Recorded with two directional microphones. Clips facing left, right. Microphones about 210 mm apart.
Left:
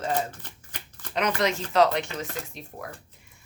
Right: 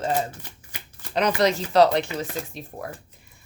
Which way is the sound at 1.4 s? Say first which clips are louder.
Right 4 dB; 35° right (ahead or behind).